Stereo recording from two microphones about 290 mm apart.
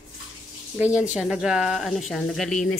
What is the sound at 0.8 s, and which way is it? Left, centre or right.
A woman's voice, centre.